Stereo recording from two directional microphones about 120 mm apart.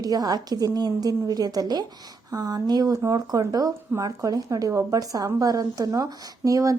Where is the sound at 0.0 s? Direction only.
30° right (ahead or behind).